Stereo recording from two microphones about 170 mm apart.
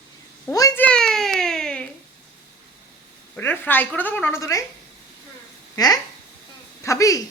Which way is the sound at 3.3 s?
10° left (ahead or behind).